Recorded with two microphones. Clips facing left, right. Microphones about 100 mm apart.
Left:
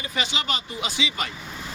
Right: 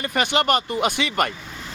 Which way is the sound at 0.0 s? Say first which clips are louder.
Right 8 dB; 60° right (ahead or behind).